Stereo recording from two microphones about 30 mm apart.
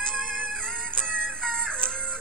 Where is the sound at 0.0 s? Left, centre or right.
Centre.